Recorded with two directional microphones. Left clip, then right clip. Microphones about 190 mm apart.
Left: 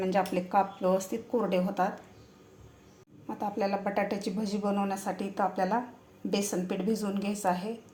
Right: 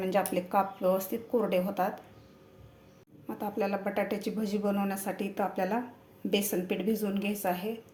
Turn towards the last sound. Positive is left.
turn(degrees=0)  # may be behind; listen again after turning